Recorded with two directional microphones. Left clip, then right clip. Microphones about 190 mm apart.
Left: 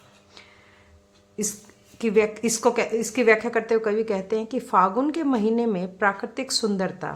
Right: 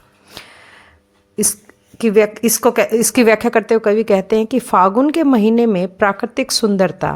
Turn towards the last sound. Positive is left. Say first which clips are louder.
# right 11 dB
turn(degrees=-40)  # may be behind; listen again after turning